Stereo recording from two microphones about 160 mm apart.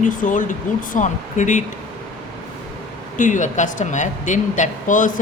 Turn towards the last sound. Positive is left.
turn(degrees=55)  # may be behind; listen again after turning